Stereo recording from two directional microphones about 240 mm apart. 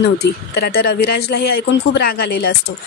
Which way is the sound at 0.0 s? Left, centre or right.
Left.